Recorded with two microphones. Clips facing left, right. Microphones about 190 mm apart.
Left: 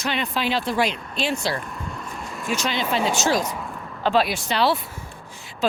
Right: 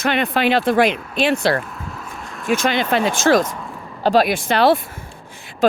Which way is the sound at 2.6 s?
55° right (ahead or behind).